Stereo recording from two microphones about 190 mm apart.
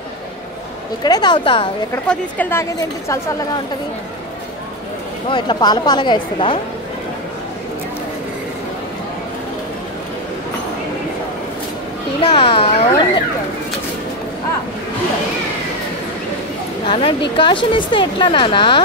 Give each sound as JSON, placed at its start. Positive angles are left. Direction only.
{"t": 1.0, "sound": "a woman's voice", "side_deg": 20}
{"t": 2.0, "sound": "a woman's voice", "side_deg": 10}
{"t": 5.3, "sound": "a woman's voice", "side_deg": 25}
{"t": 12.2, "sound": "a woman's voice", "side_deg": 30}
{"t": 16.8, "sound": "a woman's voice", "side_deg": 30}